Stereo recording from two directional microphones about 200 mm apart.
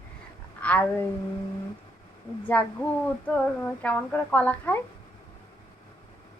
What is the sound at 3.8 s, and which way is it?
A woman's voice, 5° left (ahead or behind).